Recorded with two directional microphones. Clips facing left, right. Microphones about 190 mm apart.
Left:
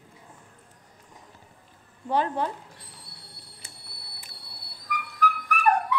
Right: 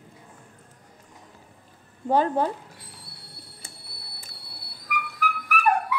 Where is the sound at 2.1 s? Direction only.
40° right (ahead or behind).